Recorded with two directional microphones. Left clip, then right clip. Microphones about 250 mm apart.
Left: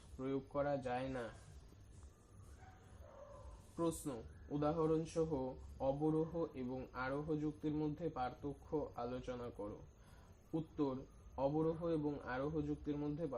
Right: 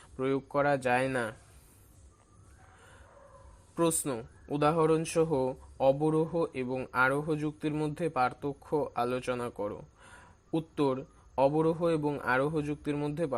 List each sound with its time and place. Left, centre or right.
0.2 s speech: right
3.8 s speech: right